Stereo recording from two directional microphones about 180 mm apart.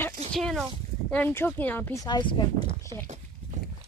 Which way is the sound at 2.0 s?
25° left (ahead or behind).